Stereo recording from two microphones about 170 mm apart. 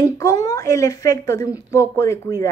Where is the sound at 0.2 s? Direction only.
20° left (ahead or behind).